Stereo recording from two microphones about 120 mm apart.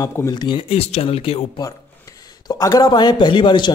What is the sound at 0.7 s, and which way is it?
Speech, 60° left (ahead or behind).